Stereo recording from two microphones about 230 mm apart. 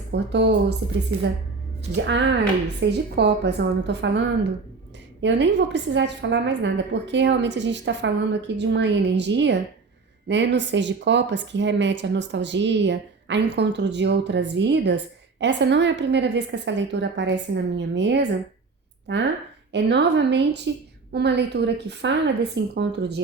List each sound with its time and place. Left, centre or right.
0.1 s speech: right
2.0 s speech: right